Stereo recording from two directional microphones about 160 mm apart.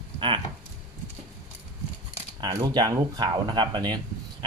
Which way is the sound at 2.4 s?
25° right (ahead or behind).